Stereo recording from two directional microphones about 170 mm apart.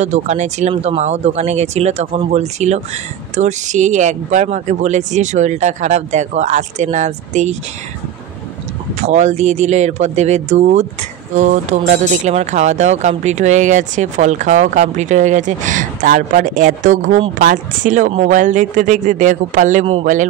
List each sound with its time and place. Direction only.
0.0 s speech: 40° right (ahead or behind)
9.0 s speech: 40° right (ahead or behind)